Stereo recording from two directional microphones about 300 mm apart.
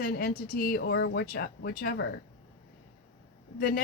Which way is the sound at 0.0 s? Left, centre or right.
Left.